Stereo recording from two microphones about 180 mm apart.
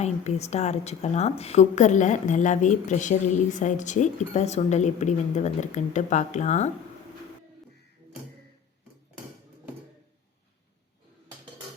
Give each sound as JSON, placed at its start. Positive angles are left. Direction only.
{"t": 0.0, "sound": "a woman's voice", "side_deg": 35}